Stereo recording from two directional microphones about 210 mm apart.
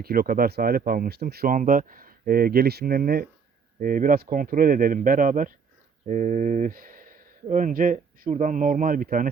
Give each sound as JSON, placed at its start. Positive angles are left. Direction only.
{"t": 0.0, "sound": "speech", "side_deg": -45}